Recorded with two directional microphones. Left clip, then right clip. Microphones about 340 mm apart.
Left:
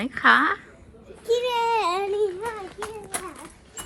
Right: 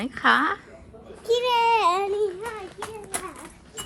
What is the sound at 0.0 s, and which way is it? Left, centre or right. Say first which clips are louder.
Speech: left 2 dB; centre.